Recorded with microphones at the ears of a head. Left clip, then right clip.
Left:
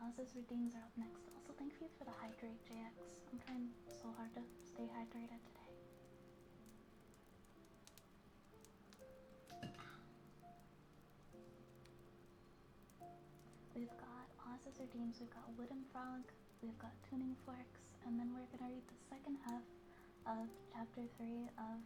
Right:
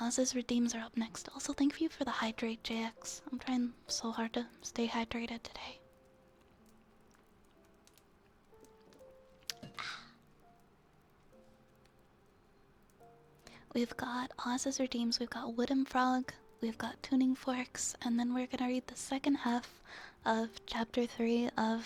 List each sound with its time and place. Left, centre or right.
0.0 s speech: right
9.5 s music: right
13.4 s speech: right